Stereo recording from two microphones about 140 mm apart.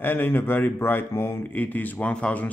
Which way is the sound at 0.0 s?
15° left (ahead or behind).